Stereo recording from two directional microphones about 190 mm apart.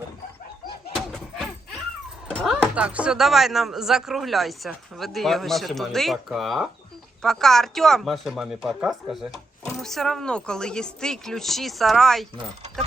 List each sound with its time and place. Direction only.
2.2 s speech: centre (ahead or behind)